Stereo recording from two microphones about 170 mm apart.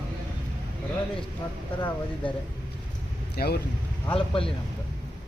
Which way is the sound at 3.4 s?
65° left (ahead or behind).